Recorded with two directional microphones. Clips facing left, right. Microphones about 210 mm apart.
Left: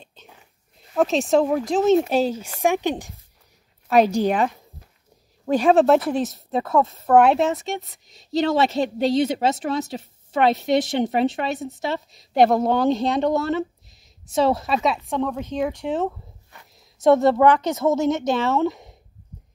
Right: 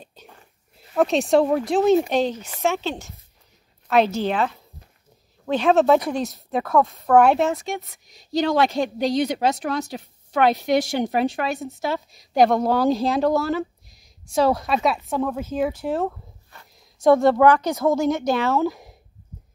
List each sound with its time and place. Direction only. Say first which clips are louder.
0.3 s a woman's voice: right 1 dB; centre (ahead or behind)
16.5 s a sound: even; 20° left (ahead or behind)
17.0 s speech: even; centre (ahead or behind)